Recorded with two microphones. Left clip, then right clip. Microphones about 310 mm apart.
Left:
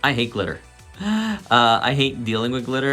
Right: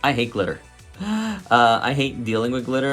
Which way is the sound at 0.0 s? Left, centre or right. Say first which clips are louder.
Even; centre.